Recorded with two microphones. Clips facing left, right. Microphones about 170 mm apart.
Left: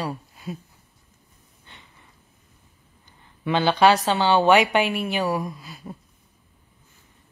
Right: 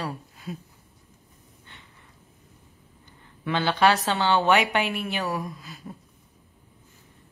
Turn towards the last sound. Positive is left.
turn(degrees=45)  # may be behind; listen again after turning